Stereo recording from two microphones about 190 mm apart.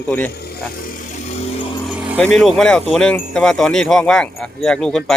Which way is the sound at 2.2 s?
5° left (ahead or behind).